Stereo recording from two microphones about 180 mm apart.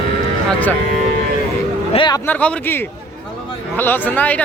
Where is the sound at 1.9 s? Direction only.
25° left (ahead or behind).